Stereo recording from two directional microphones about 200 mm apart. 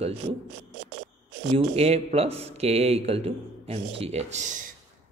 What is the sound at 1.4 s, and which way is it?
Speech, 30° right (ahead or behind).